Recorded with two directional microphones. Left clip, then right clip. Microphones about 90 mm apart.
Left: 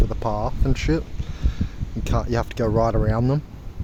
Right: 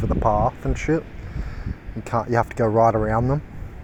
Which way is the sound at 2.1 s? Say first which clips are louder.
Right 4 dB; 25° left (ahead or behind).